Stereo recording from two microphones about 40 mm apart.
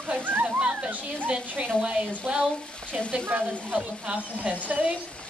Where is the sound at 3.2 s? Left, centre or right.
Right.